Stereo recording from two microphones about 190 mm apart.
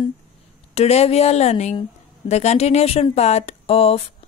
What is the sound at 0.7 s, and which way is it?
Speech, 35° left (ahead or behind).